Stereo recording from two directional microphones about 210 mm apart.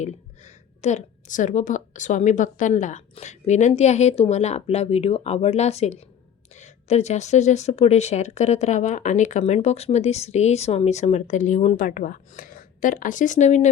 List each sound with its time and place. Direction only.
0.0 s speech: 35° left (ahead or behind)